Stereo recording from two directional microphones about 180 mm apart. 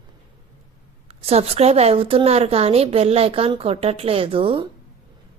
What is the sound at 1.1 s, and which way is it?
Speech, 35° right (ahead or behind).